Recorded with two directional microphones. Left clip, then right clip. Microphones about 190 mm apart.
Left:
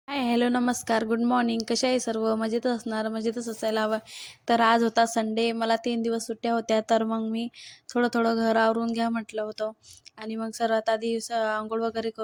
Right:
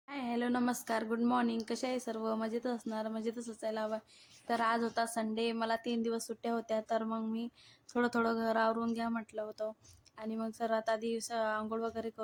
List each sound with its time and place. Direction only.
0.1 s a woman's voice: 40° left (ahead or behind)